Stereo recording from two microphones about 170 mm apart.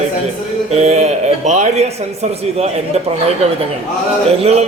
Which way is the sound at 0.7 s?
40° right (ahead or behind).